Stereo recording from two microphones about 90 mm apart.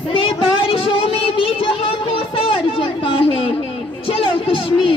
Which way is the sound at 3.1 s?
90° left.